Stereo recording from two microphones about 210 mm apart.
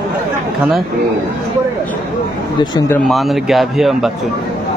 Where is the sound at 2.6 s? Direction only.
20° left (ahead or behind).